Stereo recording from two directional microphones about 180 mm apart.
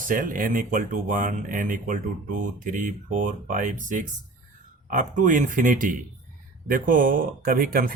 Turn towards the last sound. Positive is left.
turn(degrees=-55)  # may be behind; listen again after turning